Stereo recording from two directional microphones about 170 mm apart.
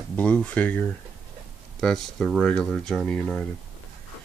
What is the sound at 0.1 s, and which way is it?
Speech, 5° left (ahead or behind).